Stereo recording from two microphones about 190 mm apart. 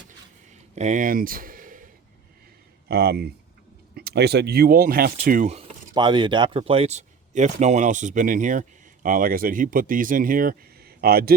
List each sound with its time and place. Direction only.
0.8 s speech: 40° right (ahead or behind)
2.9 s speech: 55° right (ahead or behind)
5.9 s speech: 25° right (ahead or behind); by 11.3 s 55° right (ahead or behind)